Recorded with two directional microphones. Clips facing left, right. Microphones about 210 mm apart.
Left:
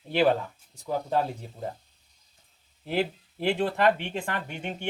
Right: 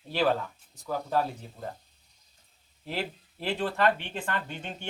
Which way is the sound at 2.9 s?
15° left (ahead or behind).